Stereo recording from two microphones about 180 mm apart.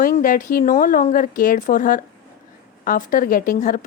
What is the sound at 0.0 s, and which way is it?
A woman's voice, 50° left (ahead or behind).